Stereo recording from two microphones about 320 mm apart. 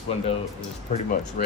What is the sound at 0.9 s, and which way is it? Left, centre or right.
Speech, left.